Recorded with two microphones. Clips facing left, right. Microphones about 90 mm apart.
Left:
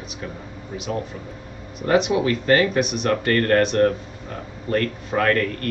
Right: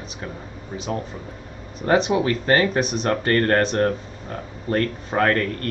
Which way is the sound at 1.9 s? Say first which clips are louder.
Even; 35° right (ahead or behind).